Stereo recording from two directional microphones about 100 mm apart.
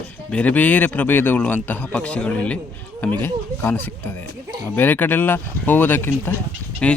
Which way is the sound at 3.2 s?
25° left (ahead or behind).